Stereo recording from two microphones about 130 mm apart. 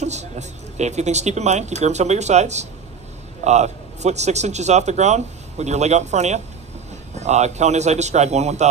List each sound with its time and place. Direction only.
0.0 s speech: 60° right (ahead or behind)